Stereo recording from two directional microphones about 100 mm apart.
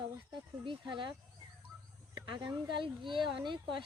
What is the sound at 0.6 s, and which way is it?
Speech, 55° right (ahead or behind).